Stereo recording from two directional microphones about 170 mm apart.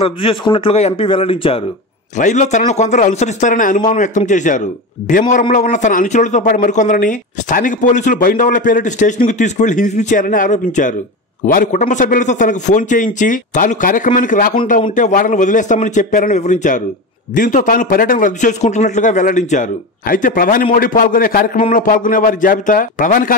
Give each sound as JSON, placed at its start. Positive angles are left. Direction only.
{"t": 0.0, "sound": "speech", "side_deg": 30}
{"t": 2.1, "sound": "a man's voice", "side_deg": 45}